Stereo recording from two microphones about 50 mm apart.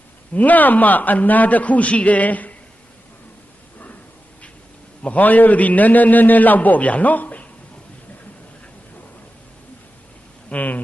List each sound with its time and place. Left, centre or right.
0.3 s a man's voice: left
5.0 s a man's voice: left
10.5 s a man's voice: left